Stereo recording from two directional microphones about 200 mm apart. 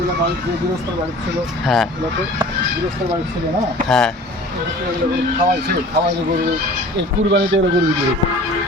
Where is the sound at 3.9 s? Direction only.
5° left (ahead or behind).